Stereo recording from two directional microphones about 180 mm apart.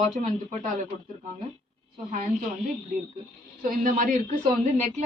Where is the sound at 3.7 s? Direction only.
45° right (ahead or behind).